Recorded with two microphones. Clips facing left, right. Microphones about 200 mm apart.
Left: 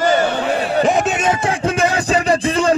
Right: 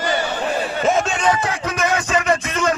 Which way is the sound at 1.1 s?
25° left (ahead or behind).